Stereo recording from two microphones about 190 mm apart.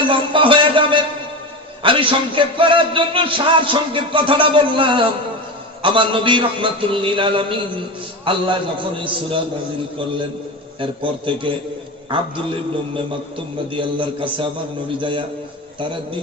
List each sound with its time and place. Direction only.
0.1 s a sound: 25° right (ahead or behind)
1.8 s a man's voice: 25° right (ahead or behind)
10.8 s a man's voice: 25° right (ahead or behind)